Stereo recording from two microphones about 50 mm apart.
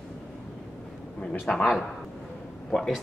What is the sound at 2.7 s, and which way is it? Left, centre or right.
Speech, left.